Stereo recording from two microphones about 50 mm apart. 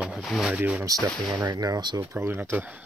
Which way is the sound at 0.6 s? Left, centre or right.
Right.